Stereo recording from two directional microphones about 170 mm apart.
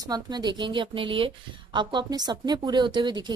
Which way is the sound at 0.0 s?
25° right (ahead or behind).